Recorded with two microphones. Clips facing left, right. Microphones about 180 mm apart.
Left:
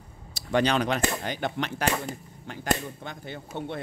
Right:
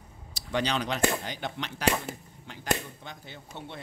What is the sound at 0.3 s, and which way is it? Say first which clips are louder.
Speech: left 5 dB; 50° left (ahead or behind).